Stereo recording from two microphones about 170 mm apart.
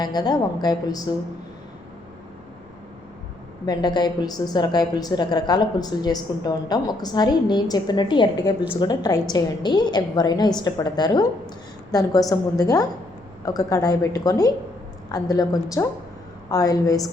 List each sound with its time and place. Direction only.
0.0 s a woman's voice: 25° left (ahead or behind)
3.7 s a woman's voice: 25° left (ahead or behind)